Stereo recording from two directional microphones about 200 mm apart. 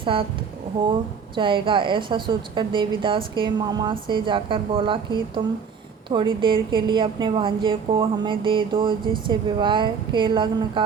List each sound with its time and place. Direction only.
0.0 s speech: 25° right (ahead or behind)
1.4 s a woman's voice: 25° right (ahead or behind)